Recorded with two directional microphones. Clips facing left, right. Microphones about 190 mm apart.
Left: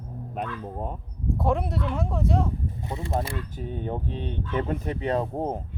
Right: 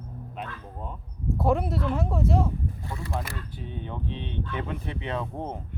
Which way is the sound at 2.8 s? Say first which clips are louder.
Left 4 dB; 20° left (ahead or behind).